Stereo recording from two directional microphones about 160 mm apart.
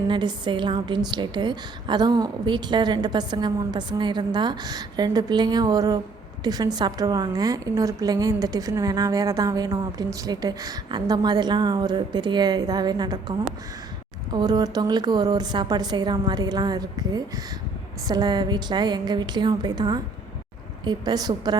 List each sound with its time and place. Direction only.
0.1 s a woman's voice: 30° right (ahead or behind)
14.3 s a woman's voice: 25° right (ahead or behind)